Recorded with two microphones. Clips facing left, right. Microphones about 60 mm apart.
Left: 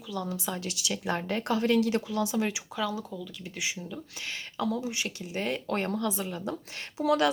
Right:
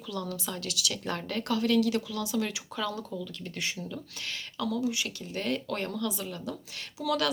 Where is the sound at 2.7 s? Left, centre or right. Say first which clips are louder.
Right 2 dB; centre.